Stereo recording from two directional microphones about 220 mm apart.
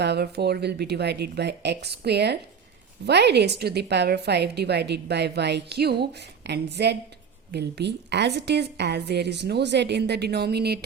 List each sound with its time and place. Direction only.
0.0 s a woman's voice: 50° right (ahead or behind)